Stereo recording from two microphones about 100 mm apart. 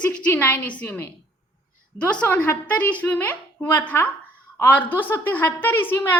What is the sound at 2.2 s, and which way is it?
A woman's voice, 15° left (ahead or behind).